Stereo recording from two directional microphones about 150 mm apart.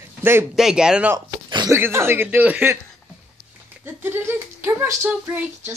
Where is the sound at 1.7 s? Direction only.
15° right (ahead or behind).